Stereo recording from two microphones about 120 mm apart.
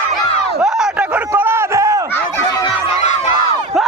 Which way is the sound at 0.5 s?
5° right (ahead or behind).